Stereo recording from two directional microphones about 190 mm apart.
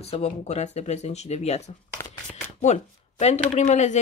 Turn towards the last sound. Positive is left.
turn(degrees=35)  # may be behind; listen again after turning